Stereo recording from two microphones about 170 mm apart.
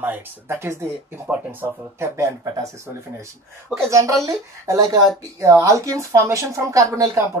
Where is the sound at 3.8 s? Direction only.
20° right (ahead or behind).